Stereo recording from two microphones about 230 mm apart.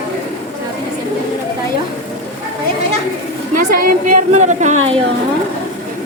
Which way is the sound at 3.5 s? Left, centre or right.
Right.